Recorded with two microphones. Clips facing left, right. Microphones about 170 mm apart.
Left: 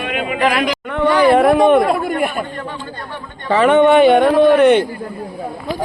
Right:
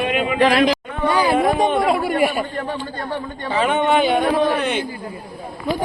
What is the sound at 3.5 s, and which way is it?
A man's voice, 65° left (ahead or behind).